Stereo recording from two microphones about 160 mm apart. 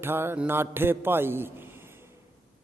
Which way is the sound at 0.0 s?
15° right (ahead or behind).